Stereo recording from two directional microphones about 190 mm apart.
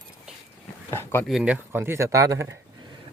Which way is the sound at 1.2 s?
5° right (ahead or behind).